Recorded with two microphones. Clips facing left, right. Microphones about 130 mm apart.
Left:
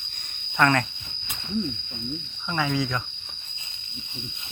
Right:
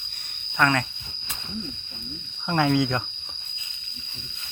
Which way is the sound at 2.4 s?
55° right (ahead or behind).